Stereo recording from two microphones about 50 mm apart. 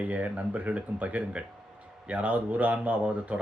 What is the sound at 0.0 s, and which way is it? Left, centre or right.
Speech, right.